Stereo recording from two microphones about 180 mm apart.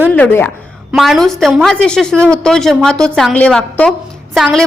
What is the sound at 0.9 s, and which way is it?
A woman's voice, centre (ahead or behind).